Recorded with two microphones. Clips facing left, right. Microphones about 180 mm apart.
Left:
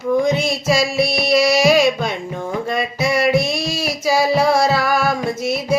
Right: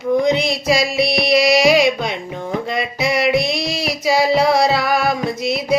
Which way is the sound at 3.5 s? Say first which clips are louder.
Even; 65° right (ahead or behind).